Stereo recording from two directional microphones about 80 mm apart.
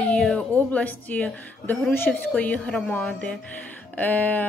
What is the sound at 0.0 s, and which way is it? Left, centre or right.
Music, centre.